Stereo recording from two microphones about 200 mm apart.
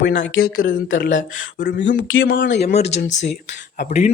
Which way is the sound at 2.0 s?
80° left.